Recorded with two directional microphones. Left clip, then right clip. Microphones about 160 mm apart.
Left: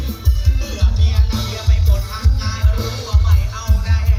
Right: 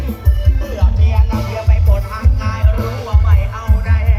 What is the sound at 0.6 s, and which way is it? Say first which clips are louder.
Music: right 3 dB; 40° left (ahead or behind).